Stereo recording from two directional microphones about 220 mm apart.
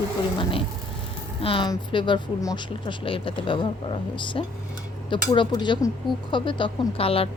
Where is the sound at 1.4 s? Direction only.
25° left (ahead or behind).